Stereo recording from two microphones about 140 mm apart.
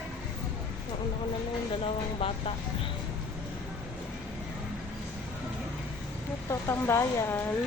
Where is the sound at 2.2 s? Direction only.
40° left (ahead or behind).